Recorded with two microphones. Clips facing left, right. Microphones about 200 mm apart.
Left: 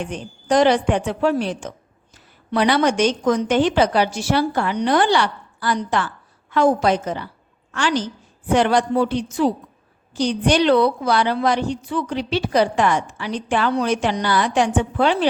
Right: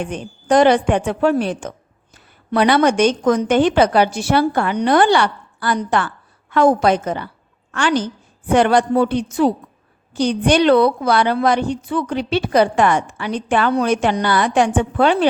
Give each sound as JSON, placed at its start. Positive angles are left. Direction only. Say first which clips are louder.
{"t": 0.0, "sound": "a woman's voice", "louder": "right 3 dB", "side_deg": -55}